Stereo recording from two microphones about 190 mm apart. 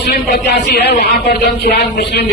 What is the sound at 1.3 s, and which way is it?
Speech, 55° left (ahead or behind).